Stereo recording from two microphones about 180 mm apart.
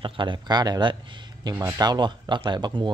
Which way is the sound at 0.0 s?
25° right (ahead or behind).